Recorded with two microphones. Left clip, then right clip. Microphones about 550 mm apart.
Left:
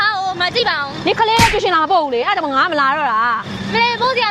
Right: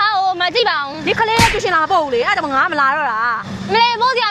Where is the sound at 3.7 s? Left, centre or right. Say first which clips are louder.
Right 2 dB; right.